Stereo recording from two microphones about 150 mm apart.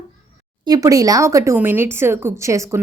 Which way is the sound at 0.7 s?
25° right (ahead or behind).